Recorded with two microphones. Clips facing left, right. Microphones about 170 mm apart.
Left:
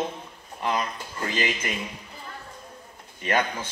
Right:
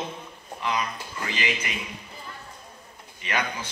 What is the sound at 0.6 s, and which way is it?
A man's voice, 50° left (ahead or behind).